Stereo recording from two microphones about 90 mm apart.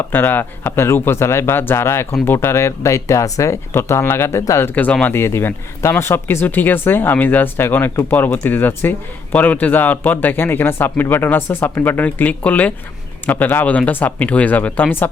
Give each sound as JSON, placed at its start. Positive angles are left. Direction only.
{"t": 0.1, "sound": "speech", "side_deg": 20}
{"t": 4.7, "sound": "speech", "side_deg": 20}